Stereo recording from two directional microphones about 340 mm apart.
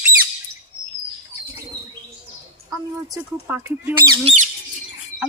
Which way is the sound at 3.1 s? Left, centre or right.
Centre.